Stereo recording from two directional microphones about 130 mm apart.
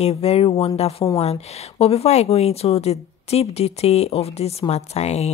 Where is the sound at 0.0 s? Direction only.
50° left (ahead or behind).